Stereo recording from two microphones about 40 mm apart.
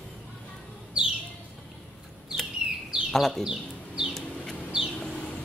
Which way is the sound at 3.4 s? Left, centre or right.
Centre.